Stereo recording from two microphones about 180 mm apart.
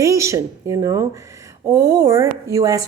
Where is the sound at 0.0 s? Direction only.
15° right (ahead or behind).